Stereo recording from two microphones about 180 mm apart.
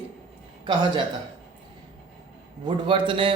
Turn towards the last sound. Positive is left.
turn(degrees=-30)  # may be behind; listen again after turning